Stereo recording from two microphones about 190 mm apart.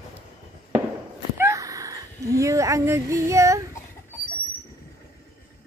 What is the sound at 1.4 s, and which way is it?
Speech, 15° right (ahead or behind).